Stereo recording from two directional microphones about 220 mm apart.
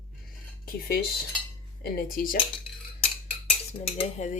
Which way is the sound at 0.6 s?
45° left (ahead or behind).